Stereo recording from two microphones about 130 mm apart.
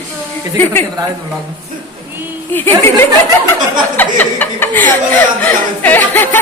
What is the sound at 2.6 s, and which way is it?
Speech, 15° left (ahead or behind).